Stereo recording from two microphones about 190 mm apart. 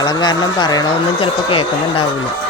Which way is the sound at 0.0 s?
20° left (ahead or behind).